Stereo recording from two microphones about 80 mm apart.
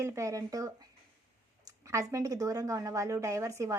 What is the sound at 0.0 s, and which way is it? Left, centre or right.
Speech, right.